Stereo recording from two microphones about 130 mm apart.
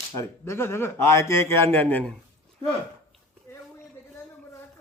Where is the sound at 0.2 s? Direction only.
20° left (ahead or behind).